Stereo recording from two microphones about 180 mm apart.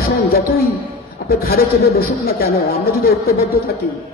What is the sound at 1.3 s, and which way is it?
Speech, 55° left (ahead or behind).